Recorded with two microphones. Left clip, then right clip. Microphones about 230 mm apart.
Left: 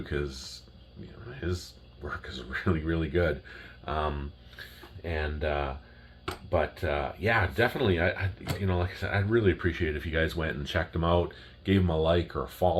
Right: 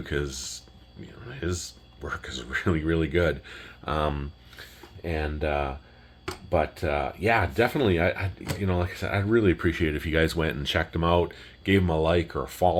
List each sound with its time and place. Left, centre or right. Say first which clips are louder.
0.0 s speech: right 4 dB; right
3.8 s speech: right 4 dB; right